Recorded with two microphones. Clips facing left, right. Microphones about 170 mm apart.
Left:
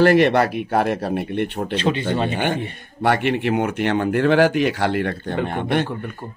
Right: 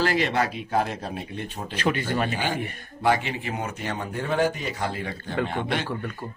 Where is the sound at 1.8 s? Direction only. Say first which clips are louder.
Left 3 dB; 25° left (ahead or behind).